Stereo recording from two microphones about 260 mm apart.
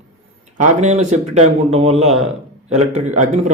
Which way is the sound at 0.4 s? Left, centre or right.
Right.